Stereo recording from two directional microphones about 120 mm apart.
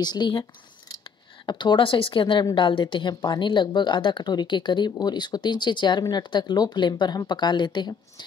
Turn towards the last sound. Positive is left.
turn(degrees=40)  # may be behind; listen again after turning